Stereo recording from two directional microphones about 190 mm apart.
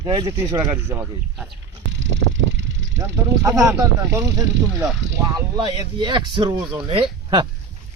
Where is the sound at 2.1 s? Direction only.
70° right (ahead or behind).